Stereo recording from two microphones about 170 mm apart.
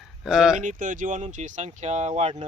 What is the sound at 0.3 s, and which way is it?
Speech, 5° right (ahead or behind).